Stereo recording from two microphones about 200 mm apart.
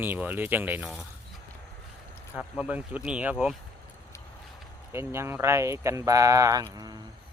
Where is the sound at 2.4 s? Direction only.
5° right (ahead or behind).